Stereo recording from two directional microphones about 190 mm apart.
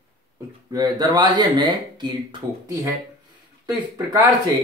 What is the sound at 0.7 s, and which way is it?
Speech, 20° right (ahead or behind).